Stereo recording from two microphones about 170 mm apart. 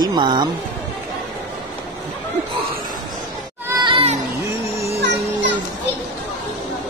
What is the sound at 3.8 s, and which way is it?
Children playing, 30° right (ahead or behind).